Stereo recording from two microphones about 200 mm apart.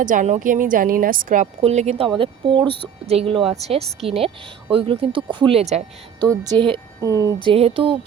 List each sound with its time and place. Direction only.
0.0 s a woman's voice: 40° right (ahead or behind)
6.2 s a woman's voice: 15° right (ahead or behind)
7.4 s speech: 30° right (ahead or behind)